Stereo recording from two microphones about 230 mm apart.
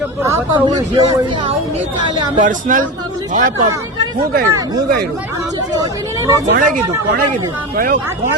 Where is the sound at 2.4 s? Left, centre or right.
Right.